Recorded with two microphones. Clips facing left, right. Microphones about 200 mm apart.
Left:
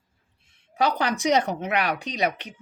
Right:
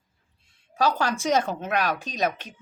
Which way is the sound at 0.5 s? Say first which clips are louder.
Even; 20° left (ahead or behind).